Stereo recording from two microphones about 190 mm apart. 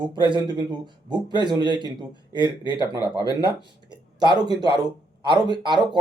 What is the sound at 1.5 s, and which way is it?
Speech, 20° right (ahead or behind).